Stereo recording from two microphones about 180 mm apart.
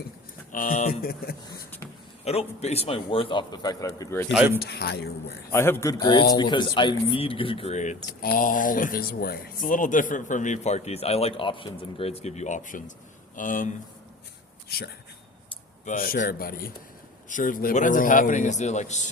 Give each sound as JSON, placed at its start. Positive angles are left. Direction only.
{"t": 0.5, "sound": "a man's voice", "side_deg": 50}
{"t": 2.2, "sound": "a man's voice", "side_deg": 35}
{"t": 4.3, "sound": "speech", "side_deg": -10}
{"t": 4.6, "sound": "a man's voice", "side_deg": 60}
{"t": 5.5, "sound": "a man's voice", "side_deg": 15}
{"t": 15.9, "sound": "a man's voice", "side_deg": 50}